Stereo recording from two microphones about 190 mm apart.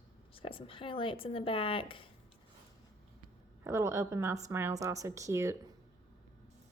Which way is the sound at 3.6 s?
15° right (ahead or behind).